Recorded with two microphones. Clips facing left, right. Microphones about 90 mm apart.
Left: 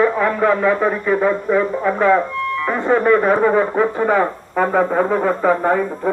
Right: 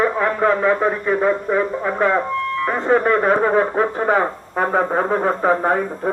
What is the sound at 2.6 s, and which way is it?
Speech, 35° right (ahead or behind).